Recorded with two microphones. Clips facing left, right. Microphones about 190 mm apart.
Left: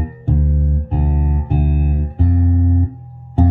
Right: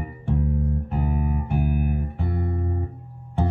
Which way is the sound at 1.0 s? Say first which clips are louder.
Left 3 dB; 45° left (ahead or behind).